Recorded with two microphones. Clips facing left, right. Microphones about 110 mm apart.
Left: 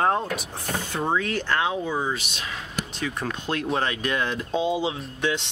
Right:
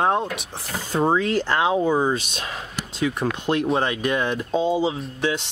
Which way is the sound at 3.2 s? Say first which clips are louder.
Right 5 dB; 15° right (ahead or behind).